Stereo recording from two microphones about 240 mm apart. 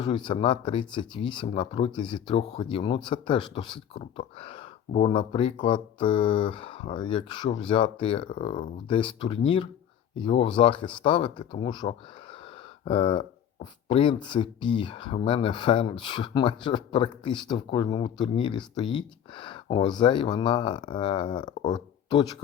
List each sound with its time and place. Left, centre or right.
0.3 s speech: left